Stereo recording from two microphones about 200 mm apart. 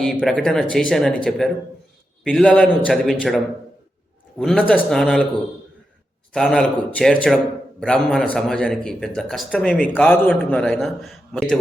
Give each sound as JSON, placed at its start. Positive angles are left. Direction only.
{"t": 0.0, "sound": "a man's voice", "side_deg": 0}
{"t": 6.3, "sound": "a man's voice", "side_deg": 5}